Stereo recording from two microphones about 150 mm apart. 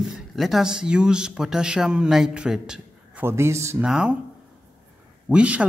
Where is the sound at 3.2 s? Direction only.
15° right (ahead or behind).